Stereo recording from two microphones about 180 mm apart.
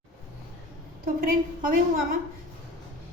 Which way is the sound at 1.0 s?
50° right (ahead or behind).